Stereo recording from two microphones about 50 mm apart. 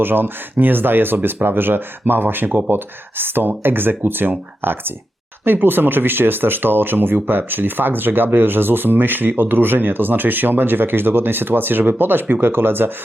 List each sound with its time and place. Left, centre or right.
0.0 s speech: right